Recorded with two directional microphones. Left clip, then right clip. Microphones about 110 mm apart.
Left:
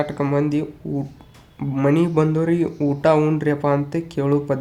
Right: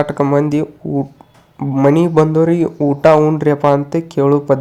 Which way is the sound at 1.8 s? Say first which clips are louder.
Right 7 dB; 35° right (ahead or behind).